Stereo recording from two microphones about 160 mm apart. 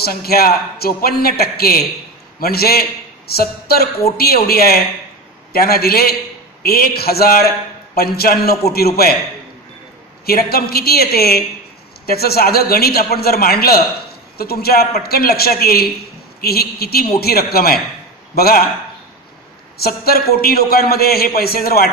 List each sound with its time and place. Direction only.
0.0 s a man's voice: 70° left (ahead or behind)
10.2 s a man's voice: 75° left (ahead or behind)
19.8 s a man's voice: 70° left (ahead or behind)